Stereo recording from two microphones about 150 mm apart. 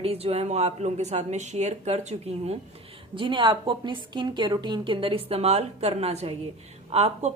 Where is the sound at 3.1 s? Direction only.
35° right (ahead or behind).